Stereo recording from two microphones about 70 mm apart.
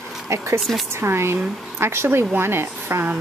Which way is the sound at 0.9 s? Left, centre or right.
Right.